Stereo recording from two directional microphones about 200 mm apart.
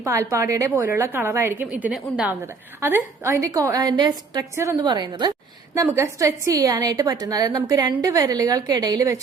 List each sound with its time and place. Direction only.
0.0 s a woman's voice: 15° right (ahead or behind)